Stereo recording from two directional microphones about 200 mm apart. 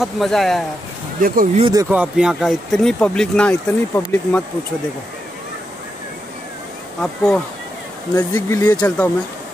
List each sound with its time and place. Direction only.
0.0 s speech: centre (ahead or behind)
1.2 s speech: 45° right (ahead or behind)
1.6 s speech: 20° right (ahead or behind)
1.9 s speech: 5° right (ahead or behind)
7.0 s speech: 5° left (ahead or behind)
8.1 s speech: 15° left (ahead or behind)